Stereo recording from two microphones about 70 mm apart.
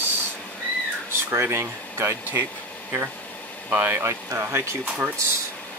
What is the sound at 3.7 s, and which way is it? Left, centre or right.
Speech, right.